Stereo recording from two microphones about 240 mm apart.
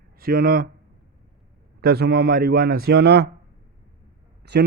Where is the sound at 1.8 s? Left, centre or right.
Right.